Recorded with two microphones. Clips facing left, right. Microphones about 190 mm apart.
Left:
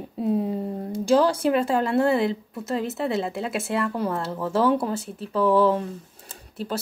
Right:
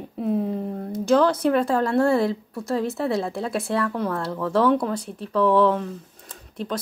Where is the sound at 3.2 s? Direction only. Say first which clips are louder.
Right 1 dB; 25° left (ahead or behind).